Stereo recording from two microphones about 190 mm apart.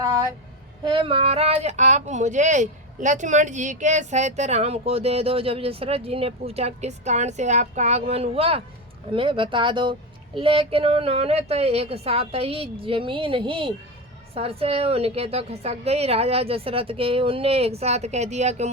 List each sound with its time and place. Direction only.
0.9 s speech: 30° right (ahead or behind)